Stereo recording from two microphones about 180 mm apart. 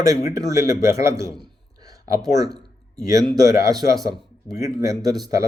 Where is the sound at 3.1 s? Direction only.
20° right (ahead or behind).